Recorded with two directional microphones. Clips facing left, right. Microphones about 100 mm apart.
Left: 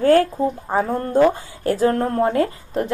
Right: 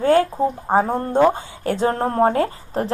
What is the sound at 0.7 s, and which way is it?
Speech, 40° right (ahead or behind).